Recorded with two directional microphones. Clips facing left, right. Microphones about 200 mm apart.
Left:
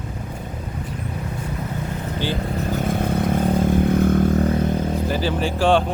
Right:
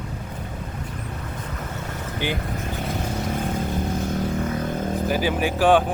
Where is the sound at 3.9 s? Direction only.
55° left (ahead or behind).